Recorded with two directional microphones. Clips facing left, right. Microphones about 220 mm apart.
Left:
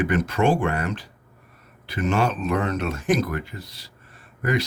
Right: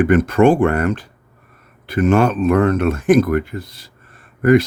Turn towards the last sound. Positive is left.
turn(degrees=-50)  # may be behind; listen again after turning